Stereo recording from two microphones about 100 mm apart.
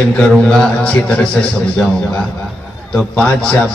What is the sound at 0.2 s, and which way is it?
A man's voice, 10° left (ahead or behind).